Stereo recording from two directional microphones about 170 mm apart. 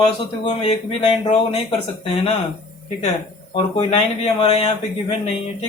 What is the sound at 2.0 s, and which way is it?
Speech, 30° left (ahead or behind).